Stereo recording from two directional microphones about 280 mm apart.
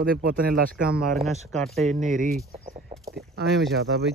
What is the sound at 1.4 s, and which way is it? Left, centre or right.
Speech, centre.